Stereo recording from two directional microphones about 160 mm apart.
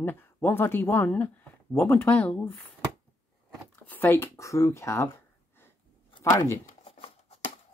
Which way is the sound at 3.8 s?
10° left (ahead or behind).